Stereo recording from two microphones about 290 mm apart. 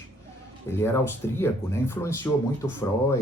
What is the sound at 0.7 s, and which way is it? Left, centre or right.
Speech, centre.